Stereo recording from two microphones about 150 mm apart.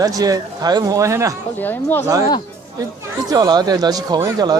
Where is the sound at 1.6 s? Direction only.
10° left (ahead or behind).